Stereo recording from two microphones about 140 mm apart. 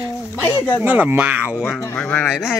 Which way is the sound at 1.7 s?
20° left (ahead or behind).